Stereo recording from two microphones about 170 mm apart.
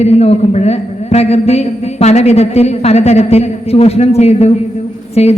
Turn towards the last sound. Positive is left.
turn(degrees=40)  # may be behind; listen again after turning